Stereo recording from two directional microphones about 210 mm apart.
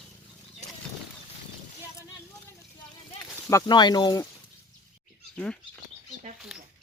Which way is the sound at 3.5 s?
20° left (ahead or behind).